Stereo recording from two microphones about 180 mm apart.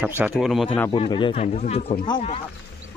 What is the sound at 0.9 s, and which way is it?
Speech, 25° left (ahead or behind).